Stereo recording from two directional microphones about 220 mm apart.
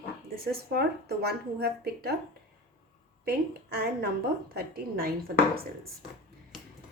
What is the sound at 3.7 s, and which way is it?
Speech, 45° right (ahead or behind).